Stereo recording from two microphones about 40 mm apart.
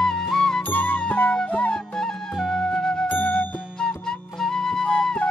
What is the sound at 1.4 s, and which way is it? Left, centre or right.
Flute, left.